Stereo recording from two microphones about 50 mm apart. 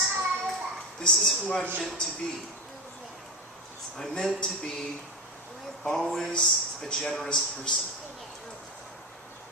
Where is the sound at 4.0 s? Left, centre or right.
Centre.